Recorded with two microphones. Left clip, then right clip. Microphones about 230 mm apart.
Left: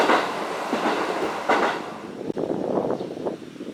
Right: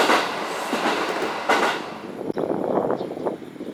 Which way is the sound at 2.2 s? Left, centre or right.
Left.